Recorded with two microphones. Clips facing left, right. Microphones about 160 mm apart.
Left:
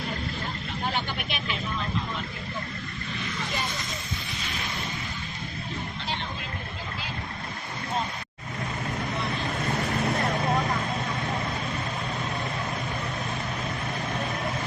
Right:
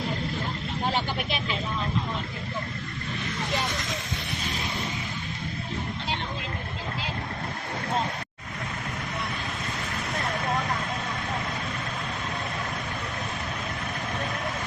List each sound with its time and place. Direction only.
0.9 s vehicle: 30° right (ahead or behind)